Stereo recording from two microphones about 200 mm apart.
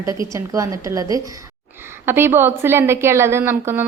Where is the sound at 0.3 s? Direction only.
15° right (ahead or behind).